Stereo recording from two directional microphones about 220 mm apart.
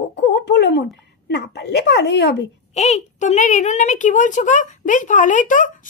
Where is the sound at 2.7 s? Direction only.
30° left (ahead or behind).